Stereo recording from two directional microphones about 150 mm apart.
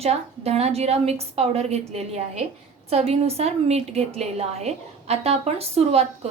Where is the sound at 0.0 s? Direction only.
45° right (ahead or behind).